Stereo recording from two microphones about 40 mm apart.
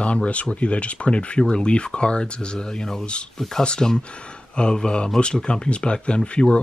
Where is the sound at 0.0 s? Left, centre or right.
Left.